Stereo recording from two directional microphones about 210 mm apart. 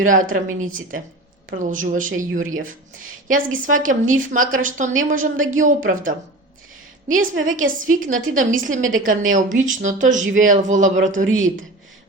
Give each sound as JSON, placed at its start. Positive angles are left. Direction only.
{"t": 0.0, "sound": "a woman's voice", "side_deg": -40}
{"t": 7.3, "sound": "a woman's voice", "side_deg": -40}